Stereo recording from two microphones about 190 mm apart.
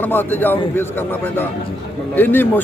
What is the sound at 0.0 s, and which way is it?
A man's voice, 10° left (ahead or behind).